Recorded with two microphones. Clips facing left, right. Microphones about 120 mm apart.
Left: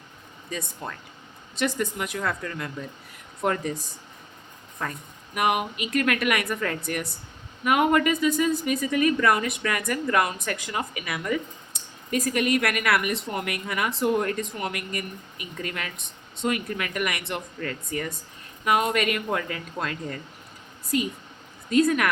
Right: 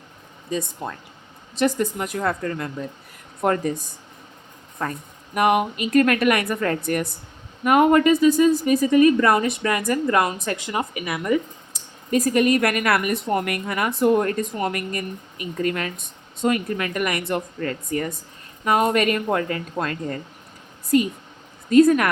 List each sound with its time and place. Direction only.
0.8 s speech: 20° right (ahead or behind)
1.5 s a woman's voice: 40° right (ahead or behind)
3.4 s speech: 50° right (ahead or behind)
4.8 s a woman's voice: 45° right (ahead or behind); by 11.3 s 25° right (ahead or behind)
12.1 s a woman's voice: 40° right (ahead or behind)
21.7 s a woman's voice: 40° right (ahead or behind)